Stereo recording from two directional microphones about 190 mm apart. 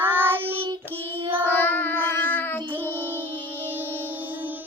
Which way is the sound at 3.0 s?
10° right (ahead or behind).